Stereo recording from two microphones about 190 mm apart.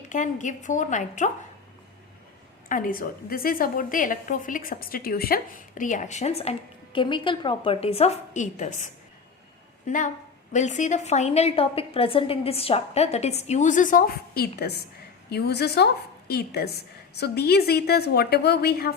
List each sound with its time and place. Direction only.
0.1 s a woman's voice: 40° left (ahead or behind)
2.6 s a woman's voice: 45° left (ahead or behind)